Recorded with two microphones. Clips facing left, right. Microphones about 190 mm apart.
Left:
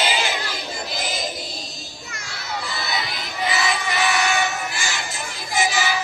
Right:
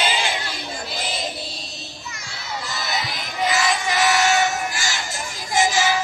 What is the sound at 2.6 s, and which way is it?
Crowd, 45° right (ahead or behind).